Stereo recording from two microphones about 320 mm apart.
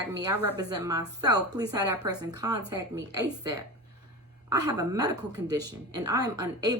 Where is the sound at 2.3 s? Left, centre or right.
Centre.